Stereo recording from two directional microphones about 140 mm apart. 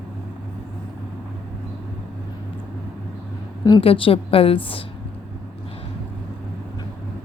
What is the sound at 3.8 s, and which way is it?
A woman's voice, 40° left (ahead or behind).